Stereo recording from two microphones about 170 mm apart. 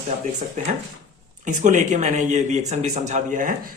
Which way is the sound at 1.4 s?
45° right (ahead or behind).